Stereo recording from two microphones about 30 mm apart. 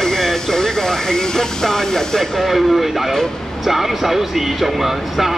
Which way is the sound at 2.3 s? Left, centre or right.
Centre.